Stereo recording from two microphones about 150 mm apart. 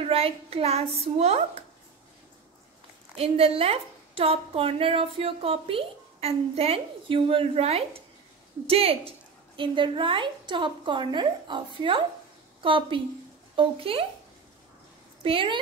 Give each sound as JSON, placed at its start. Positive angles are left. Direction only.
{"t": 0.0, "sound": "a child's voice", "side_deg": -40}
{"t": 3.2, "sound": "a woman's voice", "side_deg": -40}
{"t": 15.2, "sound": "a woman's voice", "side_deg": -35}